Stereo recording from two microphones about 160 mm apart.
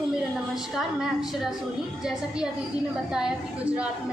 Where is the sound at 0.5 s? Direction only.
5° right (ahead or behind).